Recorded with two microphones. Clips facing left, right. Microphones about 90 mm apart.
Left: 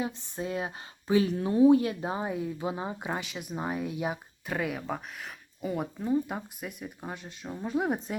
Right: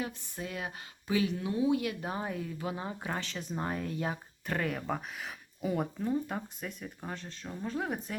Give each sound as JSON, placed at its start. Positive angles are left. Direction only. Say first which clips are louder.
{"t": 0.0, "sound": "speech", "louder": "left 5 dB", "side_deg": 25}